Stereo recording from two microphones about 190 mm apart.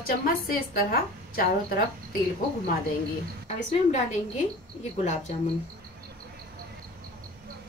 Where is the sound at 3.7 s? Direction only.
35° left (ahead or behind).